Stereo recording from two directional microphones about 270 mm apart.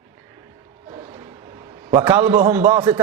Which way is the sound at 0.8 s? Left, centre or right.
Centre.